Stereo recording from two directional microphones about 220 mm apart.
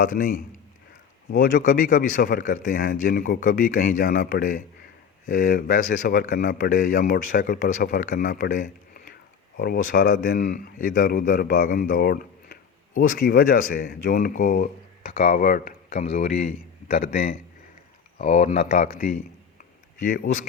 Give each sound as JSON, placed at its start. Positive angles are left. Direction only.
{"t": 0.0, "sound": "a man's voice", "side_deg": 40}